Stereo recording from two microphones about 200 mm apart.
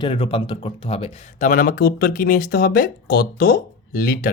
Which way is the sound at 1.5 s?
45° left (ahead or behind).